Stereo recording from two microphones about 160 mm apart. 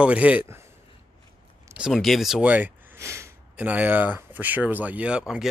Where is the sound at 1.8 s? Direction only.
Centre (ahead or behind).